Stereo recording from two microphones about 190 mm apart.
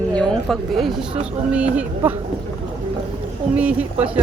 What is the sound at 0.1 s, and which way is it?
Speech, 5° left (ahead or behind).